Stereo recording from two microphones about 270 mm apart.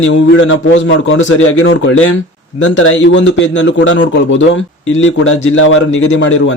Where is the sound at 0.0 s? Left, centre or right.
Left.